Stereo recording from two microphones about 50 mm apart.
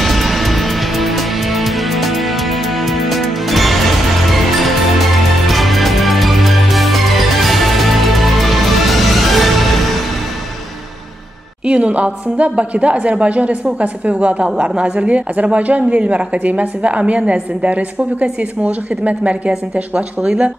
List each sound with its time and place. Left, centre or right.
0.0 s music: centre
11.6 s a woman's voice: right
19.5 s speech: centre